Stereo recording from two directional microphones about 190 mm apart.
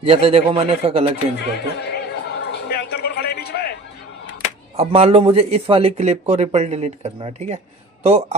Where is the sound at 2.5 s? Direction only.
60° left (ahead or behind).